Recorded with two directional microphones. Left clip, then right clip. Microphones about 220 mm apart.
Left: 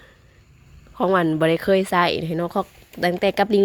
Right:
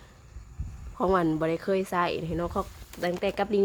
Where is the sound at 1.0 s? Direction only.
15° left (ahead or behind).